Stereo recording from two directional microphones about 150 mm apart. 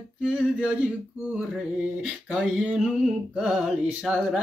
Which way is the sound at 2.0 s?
Centre (ahead or behind).